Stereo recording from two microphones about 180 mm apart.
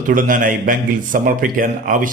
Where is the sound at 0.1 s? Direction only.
50° right (ahead or behind).